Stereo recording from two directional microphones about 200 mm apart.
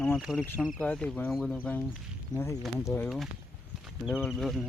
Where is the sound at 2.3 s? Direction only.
20° left (ahead or behind).